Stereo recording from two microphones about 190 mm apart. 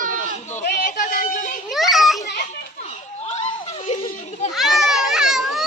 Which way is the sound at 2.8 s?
35° left (ahead or behind).